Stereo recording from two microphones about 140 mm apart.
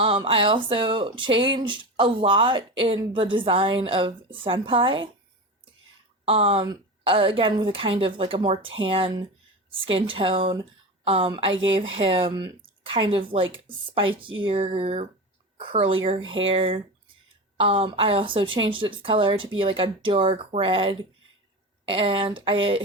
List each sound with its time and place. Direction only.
0.0 s speech: 40° right (ahead or behind)
6.2 s speech: 40° right (ahead or behind)